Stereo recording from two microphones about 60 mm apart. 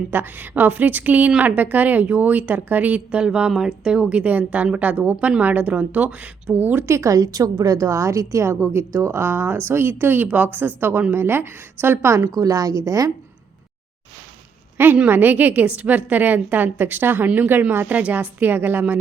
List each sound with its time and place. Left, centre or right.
0.1 s a woman's voice: right
6.8 s a woman's voice: right
10.2 s a woman's voice: right
12.3 s a woman's voice: right
14.8 s a woman's voice: right